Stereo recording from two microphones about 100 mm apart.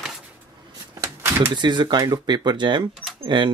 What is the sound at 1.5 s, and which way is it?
Speech, 50° right (ahead or behind).